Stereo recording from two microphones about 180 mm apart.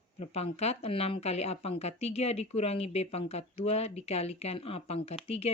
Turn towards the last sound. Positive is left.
turn(degrees=35)  # may be behind; listen again after turning